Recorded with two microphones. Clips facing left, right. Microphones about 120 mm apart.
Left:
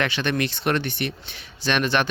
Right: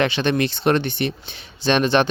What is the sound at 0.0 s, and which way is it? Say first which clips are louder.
Speech: right 5 dB; 25° right (ahead or behind).